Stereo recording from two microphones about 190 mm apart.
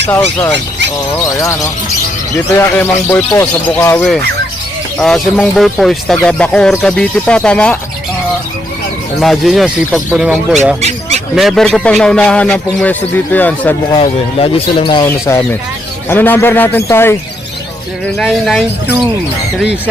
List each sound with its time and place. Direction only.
1.2 s speech: 15° left (ahead or behind)
4.9 s speech: centre (ahead or behind)
9.2 s speech: centre (ahead or behind)
10.8 s a sound: 35° right (ahead or behind)
11.3 s speech: centre (ahead or behind)
14.0 s speech: 30° left (ahead or behind); by 17.2 s 10° left (ahead or behind)
18.0 s speech: centre (ahead or behind)